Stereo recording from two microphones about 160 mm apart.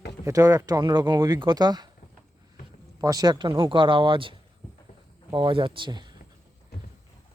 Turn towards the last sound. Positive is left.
turn(degrees=-25)  # may be behind; listen again after turning